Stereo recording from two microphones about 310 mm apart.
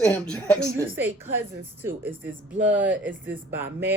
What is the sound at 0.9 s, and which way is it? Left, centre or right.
Speech, centre.